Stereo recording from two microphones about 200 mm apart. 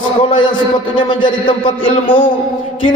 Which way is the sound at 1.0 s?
25° left (ahead or behind).